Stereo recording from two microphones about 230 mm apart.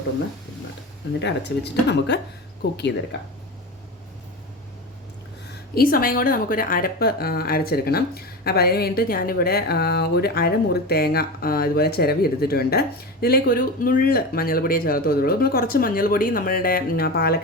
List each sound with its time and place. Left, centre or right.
1.2 s speech: left
5.7 s a woman's voice: left